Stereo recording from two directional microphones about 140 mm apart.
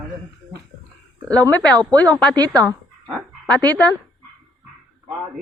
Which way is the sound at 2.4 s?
25° right (ahead or behind).